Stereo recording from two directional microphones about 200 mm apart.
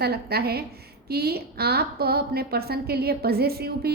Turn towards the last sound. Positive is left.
turn(degrees=-50)  # may be behind; listen again after turning